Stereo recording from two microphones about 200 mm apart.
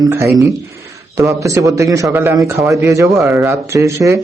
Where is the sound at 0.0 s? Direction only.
15° right (ahead or behind).